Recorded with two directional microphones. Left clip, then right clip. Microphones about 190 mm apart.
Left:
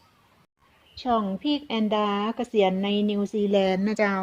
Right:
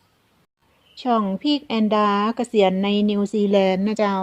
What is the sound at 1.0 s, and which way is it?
A woman's voice, 35° right (ahead or behind).